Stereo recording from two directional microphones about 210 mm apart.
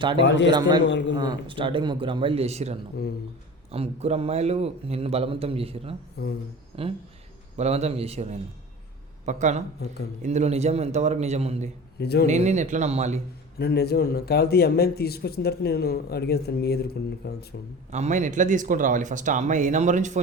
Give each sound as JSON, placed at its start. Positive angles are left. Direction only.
{"t": 0.9, "sound": "speech", "side_deg": 60}
{"t": 1.1, "sound": "a man's voice", "side_deg": -20}
{"t": 11.9, "sound": "a man's voice", "side_deg": 50}
{"t": 12.2, "sound": "speech", "side_deg": -35}
{"t": 13.6, "sound": "a man's voice", "side_deg": 50}
{"t": 17.9, "sound": "speech", "side_deg": -35}